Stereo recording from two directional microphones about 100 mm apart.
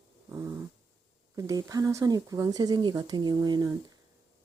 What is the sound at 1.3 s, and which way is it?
Speech, 35° right (ahead or behind).